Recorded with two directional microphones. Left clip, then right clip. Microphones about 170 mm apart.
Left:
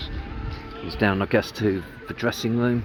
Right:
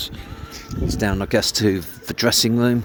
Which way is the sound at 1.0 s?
25° right (ahead or behind).